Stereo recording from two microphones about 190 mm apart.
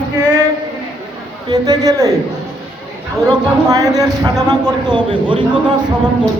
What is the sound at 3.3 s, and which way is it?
A man's voice, 20° right (ahead or behind).